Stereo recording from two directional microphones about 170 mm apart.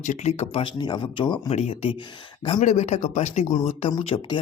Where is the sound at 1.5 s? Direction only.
40° left (ahead or behind).